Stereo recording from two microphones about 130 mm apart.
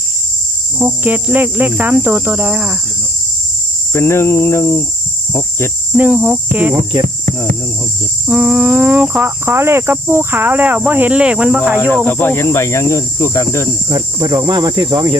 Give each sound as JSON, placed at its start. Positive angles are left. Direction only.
{"t": 0.9, "sound": "cricket", "side_deg": -15}
{"t": 3.9, "sound": "cricket", "side_deg": 20}
{"t": 6.0, "sound": "cricket", "side_deg": -10}
{"t": 8.3, "sound": "cricket", "side_deg": -10}
{"t": 11.8, "sound": "cricket", "side_deg": 15}
{"t": 13.9, "sound": "speech", "side_deg": -30}